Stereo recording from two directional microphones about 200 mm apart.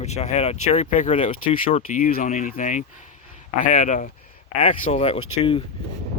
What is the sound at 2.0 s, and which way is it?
Speech, 40° left (ahead or behind).